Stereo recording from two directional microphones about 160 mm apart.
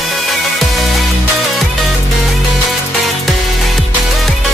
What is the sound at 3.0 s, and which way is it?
Music, centre (ahead or behind).